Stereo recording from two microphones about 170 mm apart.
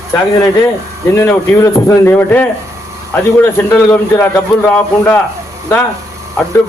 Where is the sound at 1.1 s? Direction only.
15° left (ahead or behind).